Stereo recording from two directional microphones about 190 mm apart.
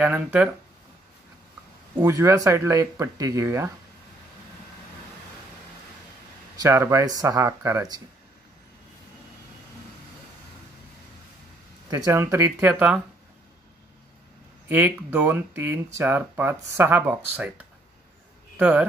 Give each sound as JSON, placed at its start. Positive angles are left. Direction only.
{"t": 0.0, "sound": "speech", "side_deg": -5}
{"t": 2.0, "sound": "speech", "side_deg": -15}
{"t": 6.6, "sound": "speech", "side_deg": -15}
{"t": 11.9, "sound": "speech", "side_deg": -15}
{"t": 14.7, "sound": "speech", "side_deg": -10}
{"t": 18.6, "sound": "speech", "side_deg": -5}